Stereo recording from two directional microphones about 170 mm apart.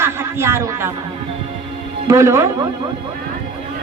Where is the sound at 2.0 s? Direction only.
15° right (ahead or behind).